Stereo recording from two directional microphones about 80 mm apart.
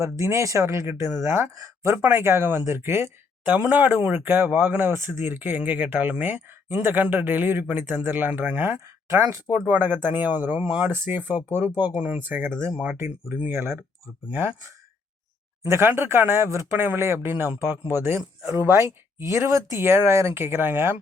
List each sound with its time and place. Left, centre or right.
0.0 s speech: right
2.0 s speech: right
3.5 s speech: right
9.6 s speech: right
10.9 s speech: right
11.7 s speech: left
12.1 s speech: right
12.5 s speech: centre
13.2 s speech: right
15.6 s speech: right